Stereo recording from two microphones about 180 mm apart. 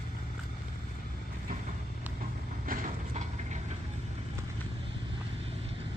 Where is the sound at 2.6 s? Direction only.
40° right (ahead or behind).